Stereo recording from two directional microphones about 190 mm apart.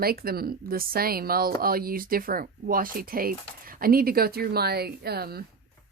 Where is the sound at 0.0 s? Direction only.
55° right (ahead or behind).